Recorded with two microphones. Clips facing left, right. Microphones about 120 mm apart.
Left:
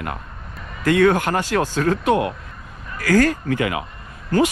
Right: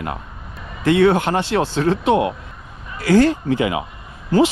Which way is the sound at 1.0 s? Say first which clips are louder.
Right 1 dB; 25° right (ahead or behind).